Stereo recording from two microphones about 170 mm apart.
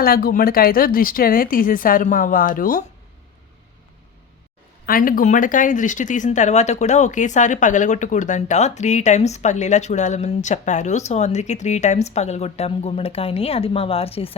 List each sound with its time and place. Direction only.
0.0 s speech: 60° left (ahead or behind)
4.9 s speech: 55° left (ahead or behind); by 14.3 s 35° left (ahead or behind)